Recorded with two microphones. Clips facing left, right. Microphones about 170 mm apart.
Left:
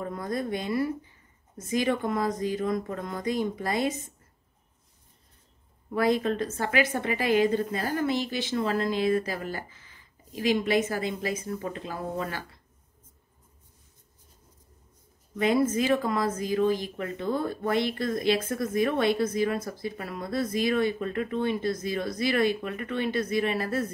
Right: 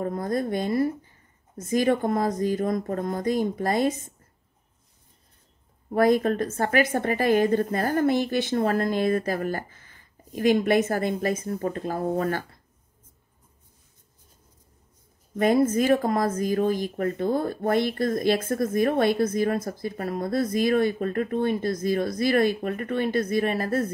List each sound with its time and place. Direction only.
0.0 s speech: 40° right (ahead or behind)
5.9 s speech: 50° right (ahead or behind)
15.3 s speech: 45° right (ahead or behind)